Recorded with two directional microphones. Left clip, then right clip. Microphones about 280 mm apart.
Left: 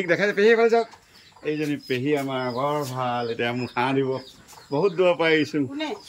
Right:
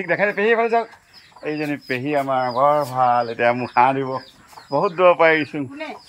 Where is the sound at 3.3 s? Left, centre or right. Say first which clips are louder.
Right 9 dB; centre.